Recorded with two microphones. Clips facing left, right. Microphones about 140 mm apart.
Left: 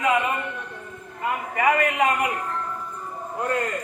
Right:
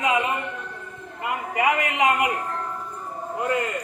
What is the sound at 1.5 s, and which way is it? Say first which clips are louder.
Speech: left 2 dB; 15° right (ahead or behind).